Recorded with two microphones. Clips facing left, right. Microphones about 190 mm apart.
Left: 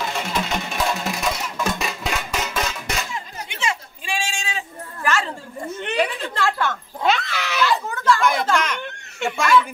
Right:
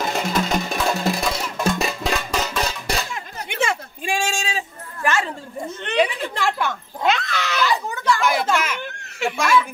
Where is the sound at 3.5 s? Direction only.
55° right (ahead or behind).